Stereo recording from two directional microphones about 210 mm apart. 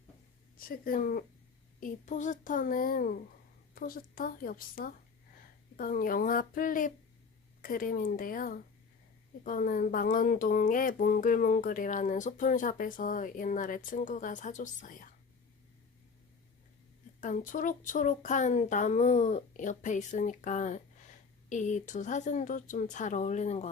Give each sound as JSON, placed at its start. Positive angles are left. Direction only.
{"t": 0.7, "sound": "a woman's voice", "side_deg": 45}
{"t": 17.2, "sound": "speech", "side_deg": 40}